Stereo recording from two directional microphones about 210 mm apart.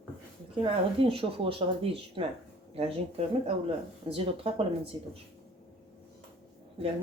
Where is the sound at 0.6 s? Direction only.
25° right (ahead or behind).